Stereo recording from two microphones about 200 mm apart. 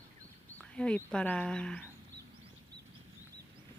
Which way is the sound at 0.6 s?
5° left (ahead or behind).